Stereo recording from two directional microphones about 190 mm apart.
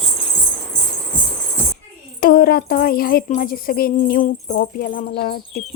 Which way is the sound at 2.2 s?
50° left (ahead or behind).